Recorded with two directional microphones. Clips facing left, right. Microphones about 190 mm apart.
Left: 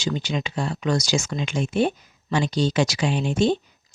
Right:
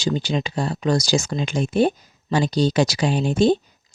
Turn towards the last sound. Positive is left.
turn(degrees=-35)  # may be behind; listen again after turning